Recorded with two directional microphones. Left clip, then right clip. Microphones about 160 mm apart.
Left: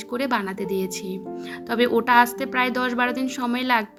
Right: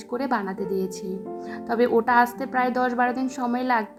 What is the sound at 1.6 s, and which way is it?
Speech, 45° left (ahead or behind).